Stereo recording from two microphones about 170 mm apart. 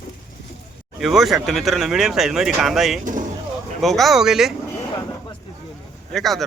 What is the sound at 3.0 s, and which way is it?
Speech, 50° right (ahead or behind).